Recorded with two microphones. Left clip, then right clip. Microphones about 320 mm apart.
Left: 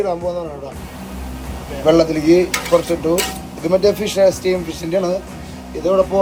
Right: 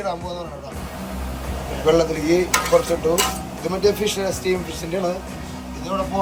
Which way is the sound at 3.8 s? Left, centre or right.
Centre.